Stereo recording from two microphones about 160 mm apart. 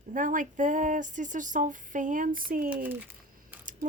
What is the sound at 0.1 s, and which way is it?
Speech, 55° right (ahead or behind).